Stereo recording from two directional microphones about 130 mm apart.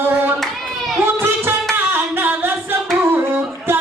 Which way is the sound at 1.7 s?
15° right (ahead or behind).